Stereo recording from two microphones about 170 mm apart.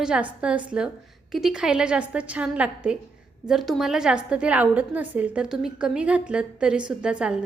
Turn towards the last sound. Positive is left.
turn(degrees=-5)  # may be behind; listen again after turning